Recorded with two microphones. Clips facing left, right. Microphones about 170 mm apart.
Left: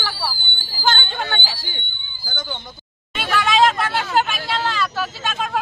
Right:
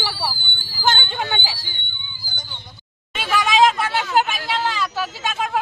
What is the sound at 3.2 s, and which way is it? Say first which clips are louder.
Vehicle: even; 15° right (ahead or behind).